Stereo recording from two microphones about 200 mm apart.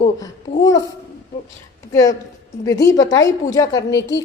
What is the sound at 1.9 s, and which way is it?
A woman's voice, 15° left (ahead or behind).